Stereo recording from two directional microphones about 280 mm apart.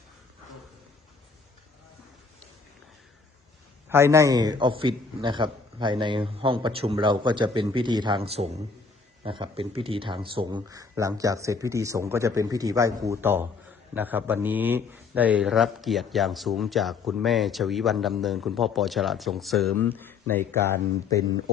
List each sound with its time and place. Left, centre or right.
3.8 s a man's voice: centre